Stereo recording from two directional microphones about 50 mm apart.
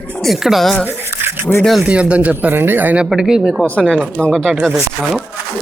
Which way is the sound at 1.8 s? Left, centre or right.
Right.